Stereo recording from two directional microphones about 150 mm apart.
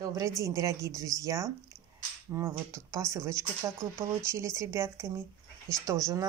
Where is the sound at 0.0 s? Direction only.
20° right (ahead or behind).